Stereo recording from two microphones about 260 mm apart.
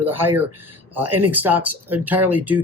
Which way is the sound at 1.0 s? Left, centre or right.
Right.